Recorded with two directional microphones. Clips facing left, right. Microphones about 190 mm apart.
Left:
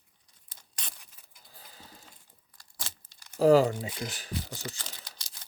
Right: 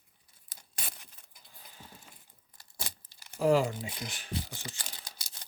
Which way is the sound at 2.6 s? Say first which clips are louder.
Right 2 dB; 15° right (ahead or behind).